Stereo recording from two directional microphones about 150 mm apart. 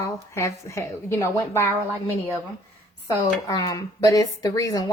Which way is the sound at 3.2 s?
25° left (ahead or behind).